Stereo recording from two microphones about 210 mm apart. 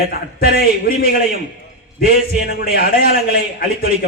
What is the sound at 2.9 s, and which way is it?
Speech, 45° left (ahead or behind).